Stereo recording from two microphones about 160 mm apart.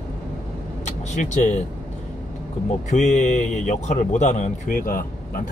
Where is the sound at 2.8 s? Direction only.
45° left (ahead or behind).